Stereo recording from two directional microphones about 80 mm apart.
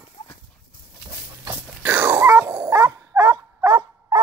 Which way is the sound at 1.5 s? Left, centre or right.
Right.